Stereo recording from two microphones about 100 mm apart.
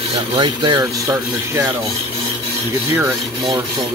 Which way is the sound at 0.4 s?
45° right (ahead or behind).